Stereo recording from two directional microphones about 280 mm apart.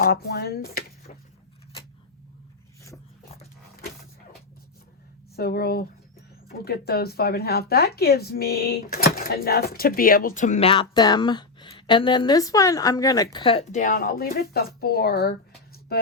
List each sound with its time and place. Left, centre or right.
0.0 s speech: left
3.3 s a sound: left
5.4 s speech: left